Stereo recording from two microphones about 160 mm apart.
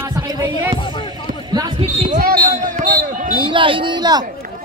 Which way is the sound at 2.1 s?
60° right (ahead or behind).